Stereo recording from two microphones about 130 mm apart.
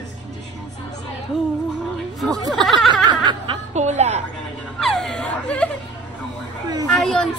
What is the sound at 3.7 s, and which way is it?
Speech, 60° right (ahead or behind).